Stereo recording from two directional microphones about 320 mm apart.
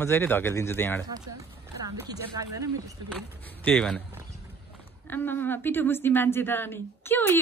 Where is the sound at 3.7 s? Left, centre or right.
Centre.